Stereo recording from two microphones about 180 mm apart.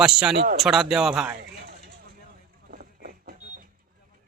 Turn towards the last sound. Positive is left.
turn(degrees=-55)  # may be behind; listen again after turning